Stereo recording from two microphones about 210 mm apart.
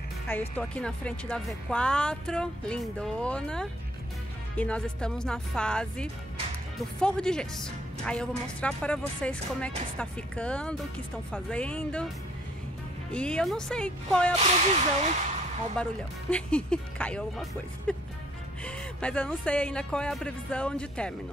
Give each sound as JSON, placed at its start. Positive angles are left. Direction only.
{"t": 0.3, "sound": "a woman's voice", "side_deg": 5}
{"t": 13.1, "sound": "a woman's voice", "side_deg": 5}
{"t": 14.4, "sound": "speech", "side_deg": -30}
{"t": 15.8, "sound": "a woman's voice", "side_deg": 5}